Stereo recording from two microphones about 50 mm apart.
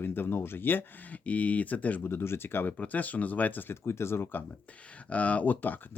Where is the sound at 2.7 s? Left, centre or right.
Left.